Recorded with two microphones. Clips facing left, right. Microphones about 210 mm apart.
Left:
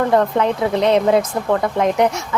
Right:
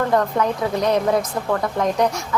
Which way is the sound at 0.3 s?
25° left (ahead or behind).